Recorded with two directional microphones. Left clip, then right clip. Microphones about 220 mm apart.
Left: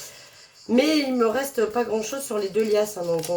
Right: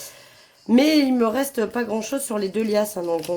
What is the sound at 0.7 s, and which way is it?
Speech, 45° right (ahead or behind).